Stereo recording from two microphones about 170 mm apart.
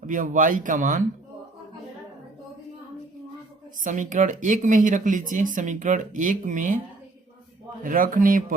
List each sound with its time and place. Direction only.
0.0 s speech: 50° right (ahead or behind)
3.8 s speech: 50° right (ahead or behind)
7.9 s speech: 55° right (ahead or behind)